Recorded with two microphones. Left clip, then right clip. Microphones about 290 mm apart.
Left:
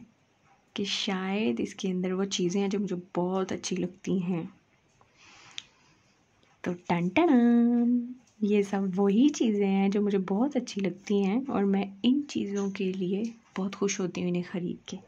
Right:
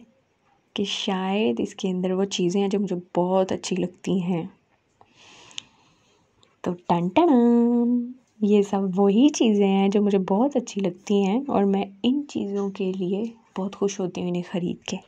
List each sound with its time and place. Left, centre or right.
0.7 s a woman's voice: centre
5.2 s a sound: centre
6.6 s a woman's voice: centre